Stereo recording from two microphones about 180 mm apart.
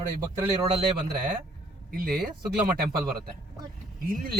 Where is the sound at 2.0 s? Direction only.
55° right (ahead or behind).